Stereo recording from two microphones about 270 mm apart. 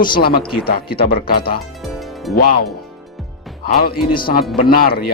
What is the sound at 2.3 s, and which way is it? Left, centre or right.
Speech, left.